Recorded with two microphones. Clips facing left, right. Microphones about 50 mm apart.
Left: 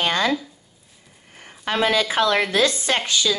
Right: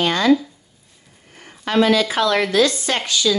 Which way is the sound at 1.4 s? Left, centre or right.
Left.